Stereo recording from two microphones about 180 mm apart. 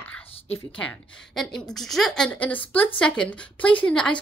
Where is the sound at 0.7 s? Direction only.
5° left (ahead or behind).